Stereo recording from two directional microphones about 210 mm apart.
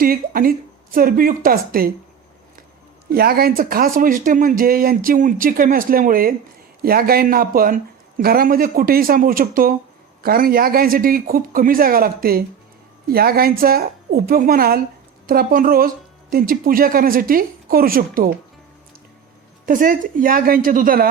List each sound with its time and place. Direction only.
0.0 s speech: 45° right (ahead or behind)
3.1 s speech: 45° right (ahead or behind)
19.6 s speech: 40° right (ahead or behind)